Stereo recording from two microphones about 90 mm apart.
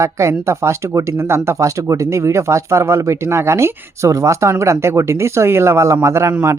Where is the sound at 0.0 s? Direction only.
30° right (ahead or behind).